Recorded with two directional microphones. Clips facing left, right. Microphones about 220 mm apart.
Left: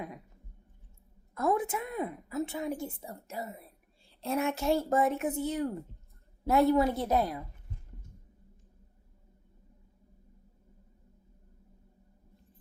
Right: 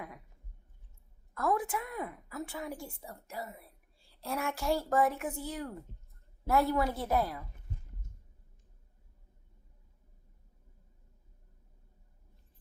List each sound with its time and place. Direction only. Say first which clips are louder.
1.3 s a woman's voice: left 3 dB; 20° left (ahead or behind)